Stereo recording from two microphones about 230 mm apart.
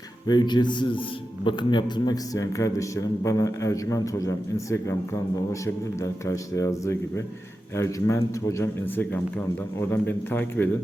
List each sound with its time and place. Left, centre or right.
0.3 s a man's voice: centre